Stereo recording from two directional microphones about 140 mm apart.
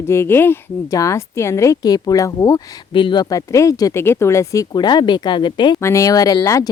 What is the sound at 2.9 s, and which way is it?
Speech, 35° left (ahead or behind).